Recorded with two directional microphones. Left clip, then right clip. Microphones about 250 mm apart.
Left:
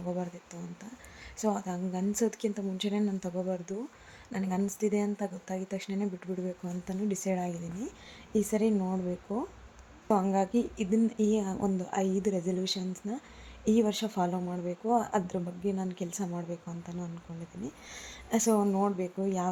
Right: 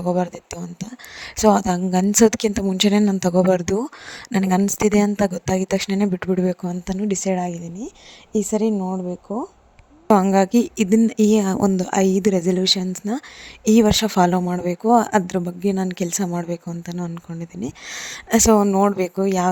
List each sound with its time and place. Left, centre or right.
0.0 s speech: right
10.1 s speech: right